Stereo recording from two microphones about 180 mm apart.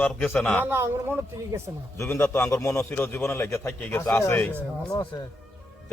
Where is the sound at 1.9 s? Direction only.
15° left (ahead or behind).